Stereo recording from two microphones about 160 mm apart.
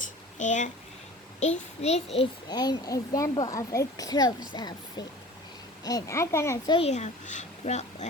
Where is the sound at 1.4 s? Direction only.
45° left (ahead or behind).